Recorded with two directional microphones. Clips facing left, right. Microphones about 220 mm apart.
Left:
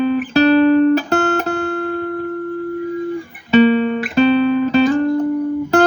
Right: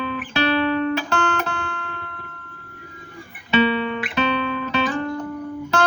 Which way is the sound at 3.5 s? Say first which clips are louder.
Left 8 dB; 40° left (ahead or behind).